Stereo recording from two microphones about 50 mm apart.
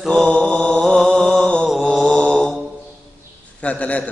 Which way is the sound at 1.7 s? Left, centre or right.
Centre.